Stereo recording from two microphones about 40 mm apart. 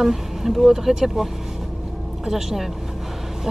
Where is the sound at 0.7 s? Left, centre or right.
Centre.